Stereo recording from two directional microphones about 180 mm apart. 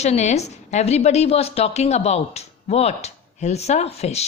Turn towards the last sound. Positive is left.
turn(degrees=35)  # may be behind; listen again after turning